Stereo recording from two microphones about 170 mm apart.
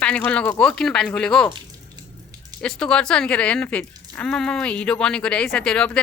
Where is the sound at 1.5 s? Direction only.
25° right (ahead or behind).